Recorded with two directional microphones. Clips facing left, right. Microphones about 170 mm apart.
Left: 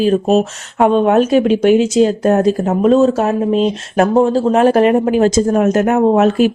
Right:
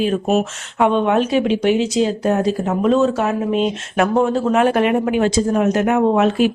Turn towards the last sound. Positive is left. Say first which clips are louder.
# left 4 dB
turn(degrees=40)  # may be behind; listen again after turning